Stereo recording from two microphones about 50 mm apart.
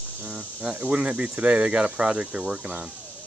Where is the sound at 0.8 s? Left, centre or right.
Right.